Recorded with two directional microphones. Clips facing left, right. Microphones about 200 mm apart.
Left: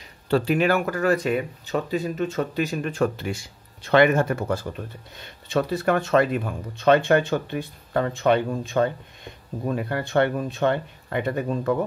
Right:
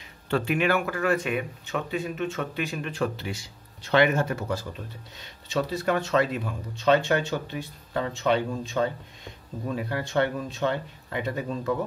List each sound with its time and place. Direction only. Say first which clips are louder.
0.3 s speech: left 4 dB; 35° left (ahead or behind); by 11.7 s 55° left (ahead or behind)